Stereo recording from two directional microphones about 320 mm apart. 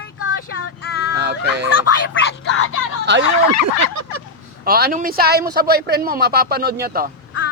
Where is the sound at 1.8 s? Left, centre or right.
Left.